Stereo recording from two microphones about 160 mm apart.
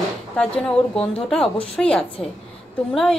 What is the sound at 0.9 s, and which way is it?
A woman's voice, 5° left (ahead or behind).